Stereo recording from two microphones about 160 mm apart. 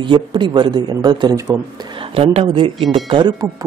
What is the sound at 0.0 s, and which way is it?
A man's voice, 30° right (ahead or behind).